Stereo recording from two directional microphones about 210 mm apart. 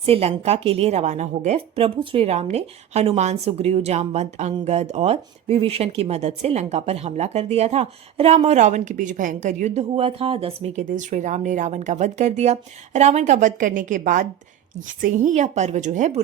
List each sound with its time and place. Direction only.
0.0 s speech: 30° right (ahead or behind)